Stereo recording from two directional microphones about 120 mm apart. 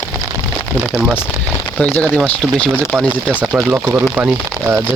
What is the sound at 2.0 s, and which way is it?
Speech, 5° left (ahead or behind).